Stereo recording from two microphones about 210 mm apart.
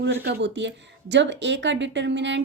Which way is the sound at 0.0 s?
55° right (ahead or behind).